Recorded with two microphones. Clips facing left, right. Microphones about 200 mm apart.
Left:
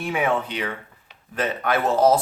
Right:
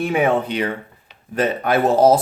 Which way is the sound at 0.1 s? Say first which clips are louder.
Right 4 dB; 50° right (ahead or behind).